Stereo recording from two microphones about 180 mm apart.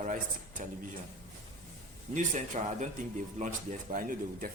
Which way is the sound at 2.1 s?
40° right (ahead or behind).